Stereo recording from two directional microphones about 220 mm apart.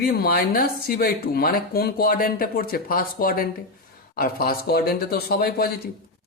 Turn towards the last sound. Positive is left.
turn(degrees=45)  # may be behind; listen again after turning